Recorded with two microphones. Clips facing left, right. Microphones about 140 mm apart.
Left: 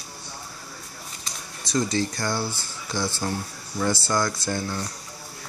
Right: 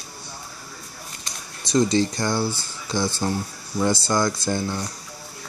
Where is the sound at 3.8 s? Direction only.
15° right (ahead or behind).